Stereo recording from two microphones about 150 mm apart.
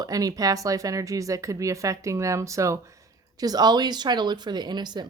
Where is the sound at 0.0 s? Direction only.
25° right (ahead or behind).